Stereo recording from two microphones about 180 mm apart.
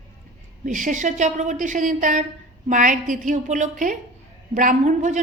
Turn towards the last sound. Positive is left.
turn(degrees=-45)  # may be behind; listen again after turning